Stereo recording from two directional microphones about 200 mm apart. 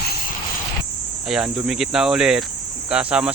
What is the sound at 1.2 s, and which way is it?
Speech, 5° right (ahead or behind).